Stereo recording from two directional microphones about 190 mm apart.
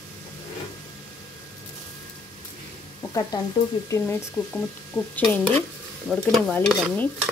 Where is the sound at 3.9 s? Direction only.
15° left (ahead or behind).